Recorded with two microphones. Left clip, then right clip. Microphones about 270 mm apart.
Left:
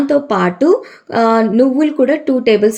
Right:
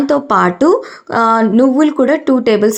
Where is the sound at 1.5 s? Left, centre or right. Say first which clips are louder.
Right 2 dB; centre.